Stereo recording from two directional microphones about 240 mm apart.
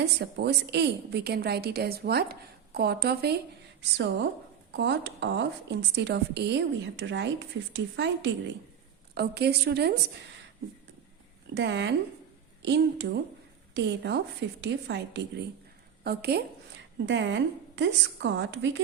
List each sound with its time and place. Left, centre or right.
0.0 s a woman's voice: right
11.5 s a woman's voice: right